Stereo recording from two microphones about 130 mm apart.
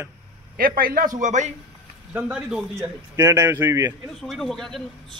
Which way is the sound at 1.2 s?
70° right (ahead or behind).